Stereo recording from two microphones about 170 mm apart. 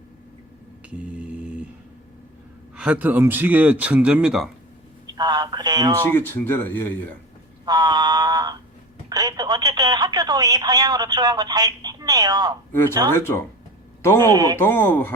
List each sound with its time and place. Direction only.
0.9 s a sound: 5° right (ahead or behind)
2.7 s speech: 10° right (ahead or behind)
5.1 s speech: 25° right (ahead or behind)
6.1 s speech: 10° left (ahead or behind)
7.6 s a sound: 25° right (ahead or behind)
9.0 s speech: 25° right (ahead or behind)
14.0 s speech: 15° left (ahead or behind)
14.3 s speech: 25° right (ahead or behind)
14.6 s speech: 10° left (ahead or behind)